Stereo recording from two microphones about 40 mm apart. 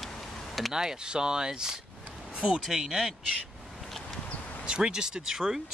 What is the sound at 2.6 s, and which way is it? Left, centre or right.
Speech, centre.